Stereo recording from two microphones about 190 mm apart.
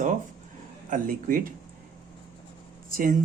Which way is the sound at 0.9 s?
45° right (ahead or behind).